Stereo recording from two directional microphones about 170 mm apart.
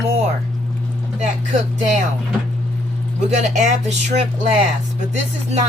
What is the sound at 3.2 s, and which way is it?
Speech, 45° right (ahead or behind).